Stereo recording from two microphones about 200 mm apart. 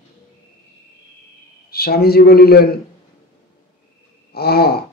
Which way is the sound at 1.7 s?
50° left (ahead or behind).